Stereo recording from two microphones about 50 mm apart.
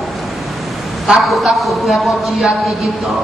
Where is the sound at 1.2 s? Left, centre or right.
Centre.